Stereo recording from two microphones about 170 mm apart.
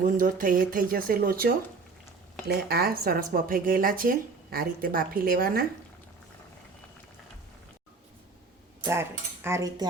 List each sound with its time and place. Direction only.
0.0 s speech: 50° right (ahead or behind)
2.5 s speech: 65° right (ahead or behind)
8.9 s cutlery: 15° right (ahead or behind)